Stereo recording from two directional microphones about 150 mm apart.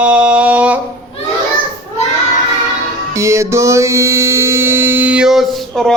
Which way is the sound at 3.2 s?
20° right (ahead or behind).